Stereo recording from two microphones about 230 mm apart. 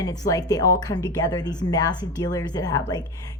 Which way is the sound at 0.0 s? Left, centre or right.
Centre.